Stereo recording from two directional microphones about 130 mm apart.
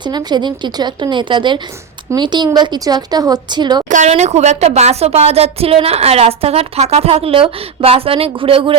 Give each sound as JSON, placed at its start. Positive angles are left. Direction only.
{"t": 0.0, "sound": "a woman's voice", "side_deg": -35}
{"t": 3.8, "sound": "speech", "side_deg": -75}
{"t": 4.1, "sound": "a woman's voice", "side_deg": -60}